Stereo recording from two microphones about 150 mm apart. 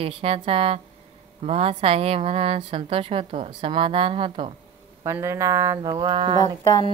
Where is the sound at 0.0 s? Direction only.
40° right (ahead or behind).